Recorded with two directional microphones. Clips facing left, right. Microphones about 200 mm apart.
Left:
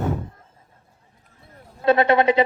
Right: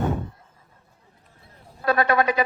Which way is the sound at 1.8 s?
25° left (ahead or behind).